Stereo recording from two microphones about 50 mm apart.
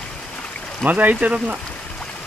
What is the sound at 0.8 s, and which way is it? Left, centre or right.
Speech, right.